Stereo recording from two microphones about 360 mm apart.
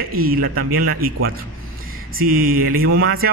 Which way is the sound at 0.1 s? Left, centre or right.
Right.